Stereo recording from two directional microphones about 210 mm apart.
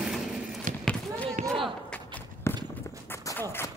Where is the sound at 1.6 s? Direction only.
5° left (ahead or behind).